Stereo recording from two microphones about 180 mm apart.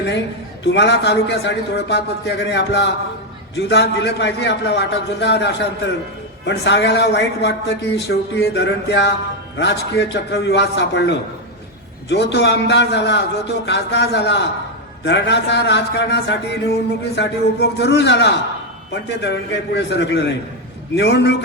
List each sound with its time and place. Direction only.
0.6 s a man's voice: 75° left (ahead or behind)